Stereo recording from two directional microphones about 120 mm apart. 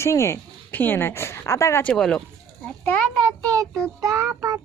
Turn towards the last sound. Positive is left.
turn(degrees=-25)  # may be behind; listen again after turning